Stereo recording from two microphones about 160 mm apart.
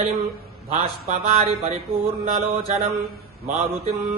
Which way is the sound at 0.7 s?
45° right (ahead or behind).